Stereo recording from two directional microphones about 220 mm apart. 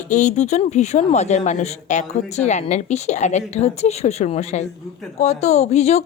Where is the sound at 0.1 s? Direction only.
35° left (ahead or behind).